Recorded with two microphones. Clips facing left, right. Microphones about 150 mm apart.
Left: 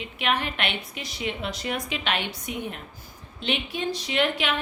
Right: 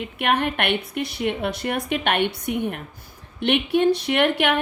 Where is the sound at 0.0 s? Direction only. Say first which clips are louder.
Right 5 dB; 55° right (ahead or behind).